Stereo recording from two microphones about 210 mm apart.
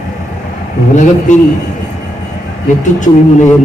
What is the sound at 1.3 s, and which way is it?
Speech, 35° left (ahead or behind).